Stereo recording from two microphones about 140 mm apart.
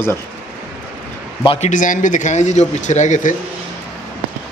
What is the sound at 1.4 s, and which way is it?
Speech, 50° left (ahead or behind).